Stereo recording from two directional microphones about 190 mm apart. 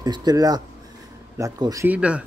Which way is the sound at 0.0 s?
20° right (ahead or behind).